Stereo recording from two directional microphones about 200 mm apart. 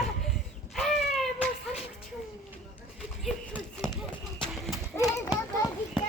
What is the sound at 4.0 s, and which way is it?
Horse, centre (ahead or behind).